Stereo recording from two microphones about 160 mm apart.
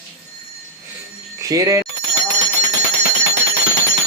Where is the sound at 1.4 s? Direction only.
20° right (ahead or behind).